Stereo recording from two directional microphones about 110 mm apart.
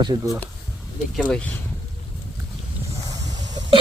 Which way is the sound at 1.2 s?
10° left (ahead or behind).